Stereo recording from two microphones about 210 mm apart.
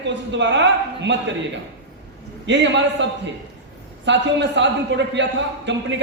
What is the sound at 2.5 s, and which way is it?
A man's voice, 60° right (ahead or behind).